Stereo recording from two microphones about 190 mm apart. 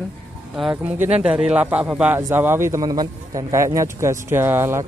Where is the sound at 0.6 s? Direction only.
5° right (ahead or behind).